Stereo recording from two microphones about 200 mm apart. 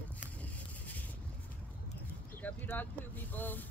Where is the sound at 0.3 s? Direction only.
5° left (ahead or behind).